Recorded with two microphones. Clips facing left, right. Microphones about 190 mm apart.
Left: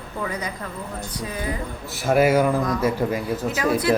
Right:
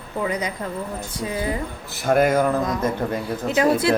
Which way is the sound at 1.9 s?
5° left (ahead or behind).